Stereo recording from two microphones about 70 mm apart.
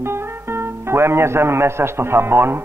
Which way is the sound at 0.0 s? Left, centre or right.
Right.